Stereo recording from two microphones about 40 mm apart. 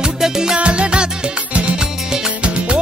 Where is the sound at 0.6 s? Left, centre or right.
Right.